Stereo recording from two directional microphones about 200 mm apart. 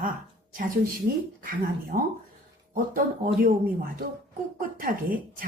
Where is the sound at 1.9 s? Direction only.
40° right (ahead or behind).